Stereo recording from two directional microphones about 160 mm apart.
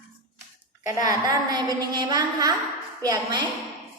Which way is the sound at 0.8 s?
25° right (ahead or behind).